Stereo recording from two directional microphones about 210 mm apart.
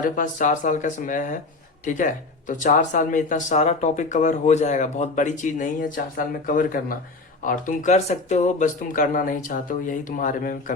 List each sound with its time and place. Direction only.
0.0 s speech: 40° left (ahead or behind)